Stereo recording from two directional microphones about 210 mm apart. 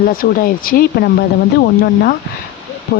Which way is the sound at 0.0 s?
40° left (ahead or behind).